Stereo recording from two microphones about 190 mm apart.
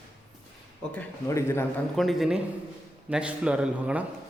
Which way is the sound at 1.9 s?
Centre (ahead or behind).